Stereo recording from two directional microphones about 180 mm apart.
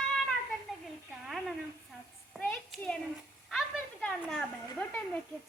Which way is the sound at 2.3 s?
5° left (ahead or behind).